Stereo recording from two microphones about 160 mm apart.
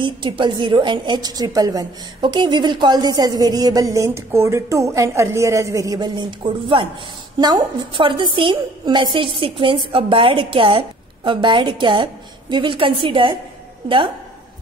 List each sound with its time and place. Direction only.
0.0 s a woman's voice: 30° right (ahead or behind)